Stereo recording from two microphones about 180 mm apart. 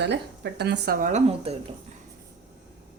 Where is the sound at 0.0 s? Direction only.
70° right (ahead or behind); by 1.5 s 45° right (ahead or behind).